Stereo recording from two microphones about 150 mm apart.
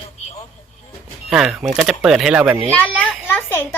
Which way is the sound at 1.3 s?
5° right (ahead or behind).